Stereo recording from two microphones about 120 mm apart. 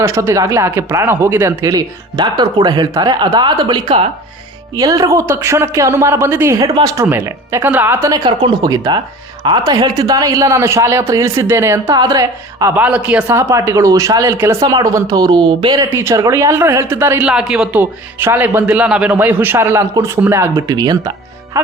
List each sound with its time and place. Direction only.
0.0 s speech: 25° right (ahead or behind); by 4.0 s 45° right (ahead or behind)
4.8 s speech: 30° right (ahead or behind)
8.4 s speech: 35° right (ahead or behind)
11.9 s speech: 35° right (ahead or behind)
12.7 s a man's voice: 10° right (ahead or behind)
13.2 s speech: 25° right (ahead or behind)
15.9 s speech: 20° right (ahead or behind)
17.2 s a man's voice: 5° right (ahead or behind); by 20.1 s 25° right (ahead or behind)
20.6 s speech: 35° right (ahead or behind)